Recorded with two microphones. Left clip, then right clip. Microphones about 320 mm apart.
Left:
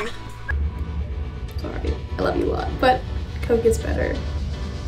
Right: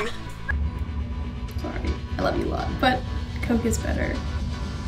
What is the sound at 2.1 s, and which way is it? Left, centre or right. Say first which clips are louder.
Speech: left 3 dB; centre.